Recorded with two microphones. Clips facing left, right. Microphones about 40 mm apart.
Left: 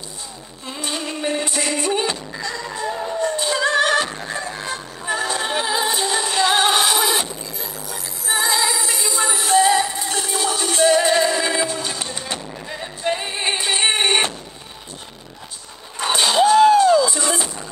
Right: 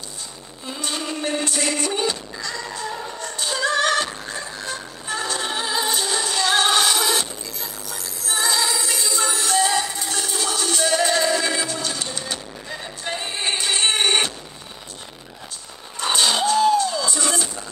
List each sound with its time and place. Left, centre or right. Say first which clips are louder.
0.7 s music: left 1 dB; centre
16.2 s a sound: left 5 dB; centre
16.5 s music: left 6 dB; left
16.9 s music: left 7 dB; centre